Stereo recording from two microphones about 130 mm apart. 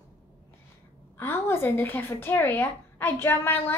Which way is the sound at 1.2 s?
20° left (ahead or behind).